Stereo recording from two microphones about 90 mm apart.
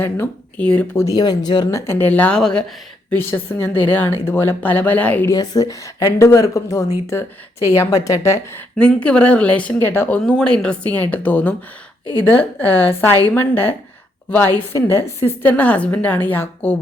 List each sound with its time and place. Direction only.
0.5 s speech: 15° left (ahead or behind)
0.9 s speech: 45° left (ahead or behind)
1.9 s speech: 20° left (ahead or behind)
3.1 s a woman's voice: 25° left (ahead or behind)
5.3 s a woman's voice: 45° left (ahead or behind)
8.7 s speech: 10° left (ahead or behind)
10.2 s a woman's voice: 10° left (ahead or behind)